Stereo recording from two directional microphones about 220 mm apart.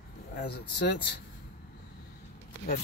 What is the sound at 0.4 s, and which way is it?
Speech, 50° left (ahead or behind).